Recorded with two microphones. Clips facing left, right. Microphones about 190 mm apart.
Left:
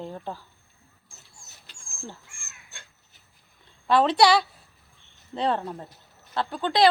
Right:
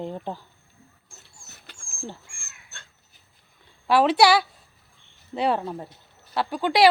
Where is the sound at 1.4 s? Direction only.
60° right (ahead or behind).